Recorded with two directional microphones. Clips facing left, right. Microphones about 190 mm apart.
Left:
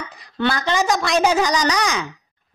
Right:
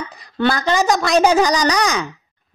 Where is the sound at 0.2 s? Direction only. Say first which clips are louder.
Right 3 dB; 40° right (ahead or behind).